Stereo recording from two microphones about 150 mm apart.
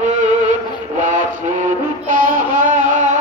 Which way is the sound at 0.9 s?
55° right (ahead or behind).